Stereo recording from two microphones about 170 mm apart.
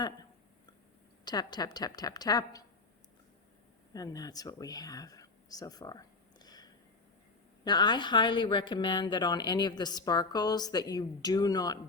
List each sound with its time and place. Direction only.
1.2 s speech: 25° left (ahead or behind)
3.9 s speech: 20° left (ahead or behind)